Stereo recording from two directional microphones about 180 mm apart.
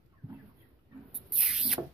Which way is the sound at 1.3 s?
Centre (ahead or behind).